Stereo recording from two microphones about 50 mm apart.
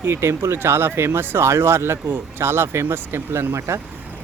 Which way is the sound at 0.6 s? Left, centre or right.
Right.